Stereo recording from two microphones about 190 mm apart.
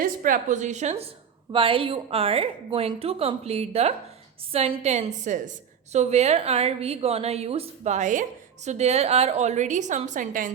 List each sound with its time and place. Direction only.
0.0 s a woman's voice: 45° right (ahead or behind)